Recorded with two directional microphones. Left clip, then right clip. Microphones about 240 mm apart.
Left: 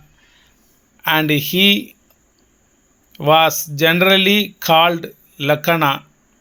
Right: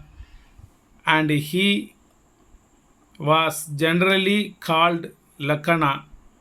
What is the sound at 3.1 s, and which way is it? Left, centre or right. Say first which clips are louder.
Speech: left 7 dB; left.